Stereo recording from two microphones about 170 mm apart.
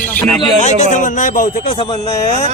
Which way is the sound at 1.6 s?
30° left (ahead or behind).